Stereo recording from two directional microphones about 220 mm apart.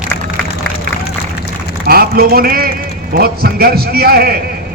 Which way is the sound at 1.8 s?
45° right (ahead or behind).